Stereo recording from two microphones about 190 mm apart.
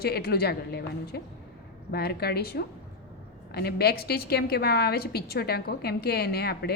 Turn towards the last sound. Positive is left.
turn(degrees=55)  # may be behind; listen again after turning